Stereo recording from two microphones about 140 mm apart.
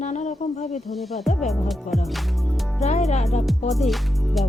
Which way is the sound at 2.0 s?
Centre (ahead or behind).